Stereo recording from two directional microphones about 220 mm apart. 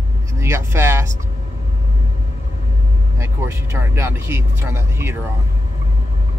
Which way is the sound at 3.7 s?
10° right (ahead or behind).